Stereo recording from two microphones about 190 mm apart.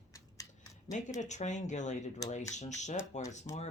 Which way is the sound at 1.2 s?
40° left (ahead or behind).